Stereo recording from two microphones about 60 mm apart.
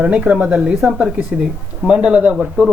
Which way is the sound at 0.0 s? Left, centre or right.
Centre.